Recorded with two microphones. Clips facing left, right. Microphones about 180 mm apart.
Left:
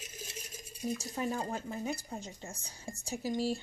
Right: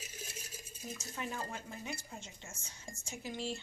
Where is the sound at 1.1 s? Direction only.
40° left (ahead or behind).